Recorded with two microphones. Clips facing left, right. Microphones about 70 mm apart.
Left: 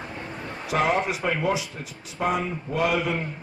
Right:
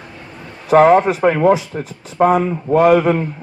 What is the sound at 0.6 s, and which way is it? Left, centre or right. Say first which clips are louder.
A man's voice: right 13 dB; right.